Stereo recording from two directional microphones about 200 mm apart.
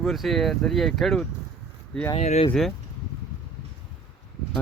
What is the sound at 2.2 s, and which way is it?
Speech, 35° left (ahead or behind).